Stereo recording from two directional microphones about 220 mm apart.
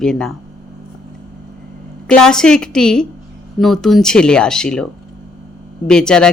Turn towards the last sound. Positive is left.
turn(degrees=5)  # may be behind; listen again after turning